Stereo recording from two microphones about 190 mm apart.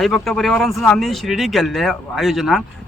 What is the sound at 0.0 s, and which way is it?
Speech, centre (ahead or behind).